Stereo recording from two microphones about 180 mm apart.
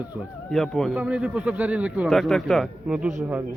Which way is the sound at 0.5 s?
Centre (ahead or behind).